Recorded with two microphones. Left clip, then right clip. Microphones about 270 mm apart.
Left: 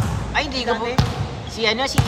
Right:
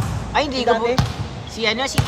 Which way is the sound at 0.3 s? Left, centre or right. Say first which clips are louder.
Right 4 dB; centre.